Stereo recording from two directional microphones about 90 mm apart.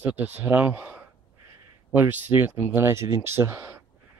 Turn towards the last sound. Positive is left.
turn(degrees=-30)  # may be behind; listen again after turning